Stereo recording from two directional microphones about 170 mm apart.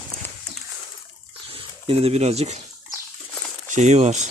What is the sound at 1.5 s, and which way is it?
Speech, 35° right (ahead or behind).